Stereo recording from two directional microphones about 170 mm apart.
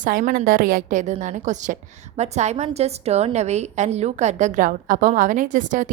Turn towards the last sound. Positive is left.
turn(degrees=-50)  # may be behind; listen again after turning